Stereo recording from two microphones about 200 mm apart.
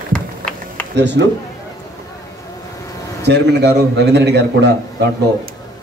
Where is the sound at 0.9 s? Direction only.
60° right (ahead or behind).